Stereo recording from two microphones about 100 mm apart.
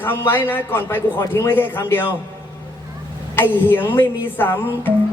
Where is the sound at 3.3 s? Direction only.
20° left (ahead or behind).